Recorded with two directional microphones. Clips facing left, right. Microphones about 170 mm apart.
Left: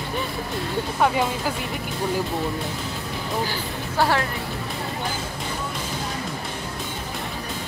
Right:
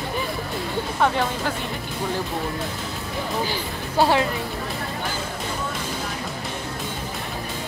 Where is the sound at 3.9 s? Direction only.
20° right (ahead or behind).